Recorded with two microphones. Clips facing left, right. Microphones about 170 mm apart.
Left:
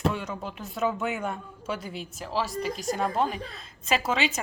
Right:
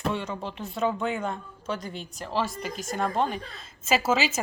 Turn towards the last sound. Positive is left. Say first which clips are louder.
# right 2 dB
turn(degrees=-5)  # may be behind; listen again after turning